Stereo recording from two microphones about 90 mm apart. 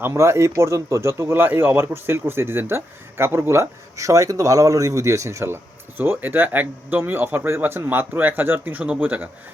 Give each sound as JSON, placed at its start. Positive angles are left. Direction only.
{"t": 0.0, "sound": "speech", "side_deg": -30}
{"t": 6.0, "sound": "speech", "side_deg": -25}